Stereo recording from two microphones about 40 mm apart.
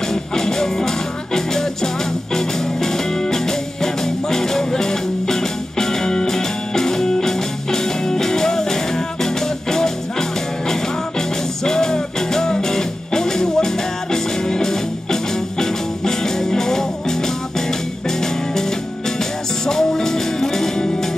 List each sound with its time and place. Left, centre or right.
0.1 s music: centre